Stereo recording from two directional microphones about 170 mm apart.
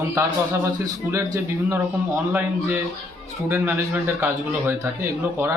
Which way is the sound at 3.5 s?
15° right (ahead or behind).